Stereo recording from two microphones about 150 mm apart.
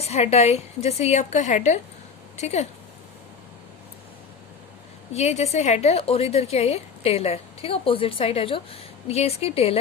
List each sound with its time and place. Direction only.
0.0 s a woman's voice: 45° left (ahead or behind)
5.1 s a woman's voice: 45° left (ahead or behind)